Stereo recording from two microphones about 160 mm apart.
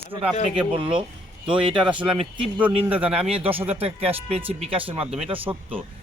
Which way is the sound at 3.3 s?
35° right (ahead or behind).